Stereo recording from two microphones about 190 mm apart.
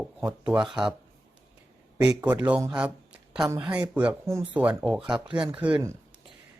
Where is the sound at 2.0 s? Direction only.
5° right (ahead or behind).